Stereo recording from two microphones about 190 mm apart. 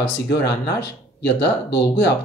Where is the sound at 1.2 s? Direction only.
65° left (ahead or behind).